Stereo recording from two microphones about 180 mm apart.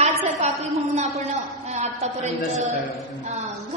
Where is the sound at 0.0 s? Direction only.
40° right (ahead or behind).